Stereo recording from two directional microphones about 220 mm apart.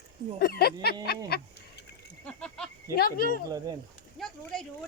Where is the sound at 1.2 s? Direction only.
45° left (ahead or behind).